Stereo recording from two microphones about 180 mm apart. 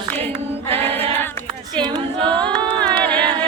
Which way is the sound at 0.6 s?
30° right (ahead or behind).